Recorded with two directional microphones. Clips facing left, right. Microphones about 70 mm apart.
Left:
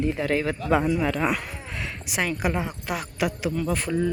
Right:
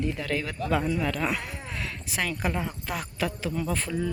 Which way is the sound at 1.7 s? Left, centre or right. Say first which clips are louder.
Left 2 dB; centre.